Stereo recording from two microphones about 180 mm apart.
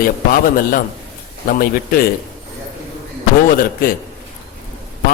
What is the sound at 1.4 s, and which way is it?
Speech, 55° left (ahead or behind).